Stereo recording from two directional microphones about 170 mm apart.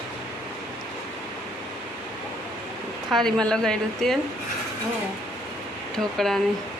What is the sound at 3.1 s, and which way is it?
A woman's voice, centre (ahead or behind).